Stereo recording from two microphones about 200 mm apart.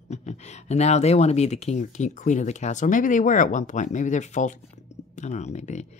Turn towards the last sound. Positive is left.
turn(degrees=35)  # may be behind; listen again after turning